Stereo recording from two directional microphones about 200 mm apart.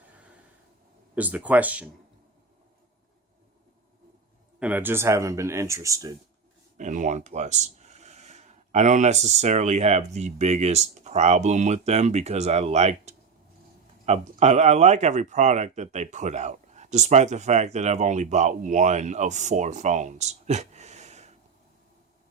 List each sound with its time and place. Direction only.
1.1 s speech: 10° right (ahead or behind)
4.6 s speech: 10° right (ahead or behind)
6.7 s speech: 40° right (ahead or behind)